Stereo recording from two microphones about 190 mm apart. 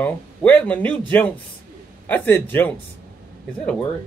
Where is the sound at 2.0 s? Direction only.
10° left (ahead or behind).